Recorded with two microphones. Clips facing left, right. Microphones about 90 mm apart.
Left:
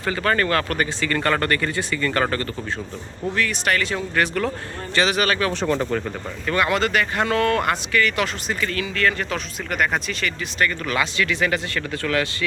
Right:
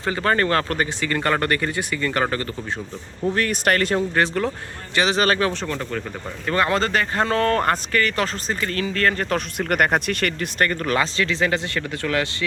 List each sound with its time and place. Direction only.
0.0 s speech: 25° right (ahead or behind)
3.3 s speech: 45° right (ahead or behind)
4.1 s speech: 25° right (ahead or behind)
5.5 s speech: 15° left (ahead or behind)
6.4 s speech: 35° right (ahead or behind)
9.6 s speech: 55° right (ahead or behind); by 12.5 s 25° right (ahead or behind)